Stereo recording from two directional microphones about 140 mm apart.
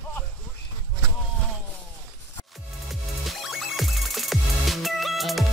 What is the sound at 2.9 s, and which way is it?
Music, centre (ahead or behind).